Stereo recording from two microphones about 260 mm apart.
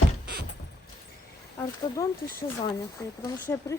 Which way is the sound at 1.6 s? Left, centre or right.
Centre.